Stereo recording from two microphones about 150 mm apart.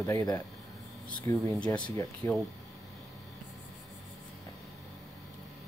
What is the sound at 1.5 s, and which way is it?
Speech, 10° left (ahead or behind).